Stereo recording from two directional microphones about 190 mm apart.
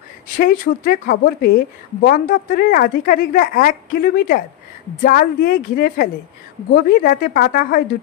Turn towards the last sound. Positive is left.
turn(degrees=50)  # may be behind; listen again after turning